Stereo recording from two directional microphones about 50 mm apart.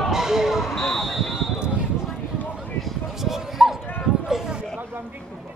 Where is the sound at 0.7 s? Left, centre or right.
Centre.